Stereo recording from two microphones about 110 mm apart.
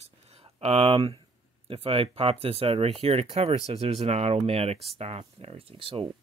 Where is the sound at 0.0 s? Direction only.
70° right (ahead or behind).